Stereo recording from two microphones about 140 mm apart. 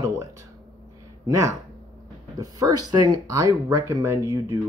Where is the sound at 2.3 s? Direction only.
25° right (ahead or behind).